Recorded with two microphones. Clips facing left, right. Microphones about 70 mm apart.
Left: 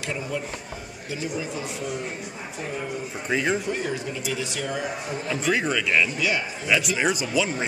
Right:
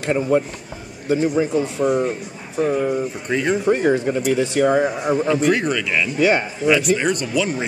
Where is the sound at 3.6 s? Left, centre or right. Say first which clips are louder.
Right 11 dB; right.